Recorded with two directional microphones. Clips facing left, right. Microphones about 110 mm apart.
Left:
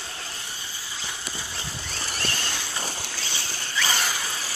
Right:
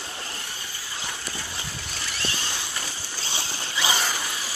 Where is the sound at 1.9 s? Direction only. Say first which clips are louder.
Left 2 dB; 40° left (ahead or behind).